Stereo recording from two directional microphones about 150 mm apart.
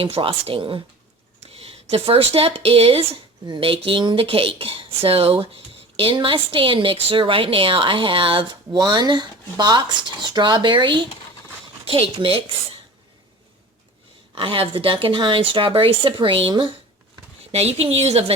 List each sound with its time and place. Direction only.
0.0 s a woman's voice: 35° right (ahead or behind)
14.3 s a woman's voice: 35° right (ahead or behind)